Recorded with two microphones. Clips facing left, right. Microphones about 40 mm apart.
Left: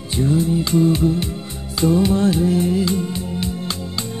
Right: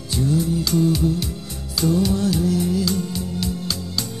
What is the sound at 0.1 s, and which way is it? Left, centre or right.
Music, left.